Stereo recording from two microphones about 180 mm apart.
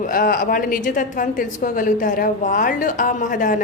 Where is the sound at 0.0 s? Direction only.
50° left (ahead or behind).